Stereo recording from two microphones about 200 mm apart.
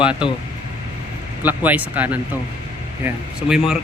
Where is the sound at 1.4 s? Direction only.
10° right (ahead or behind).